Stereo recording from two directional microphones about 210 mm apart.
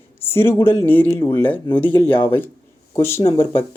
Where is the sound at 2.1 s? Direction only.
25° left (ahead or behind).